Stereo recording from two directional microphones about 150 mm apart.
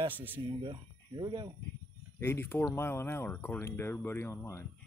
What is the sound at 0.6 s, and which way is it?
Speech, 30° right (ahead or behind).